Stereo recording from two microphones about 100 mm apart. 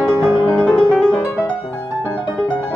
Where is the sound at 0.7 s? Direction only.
5° right (ahead or behind).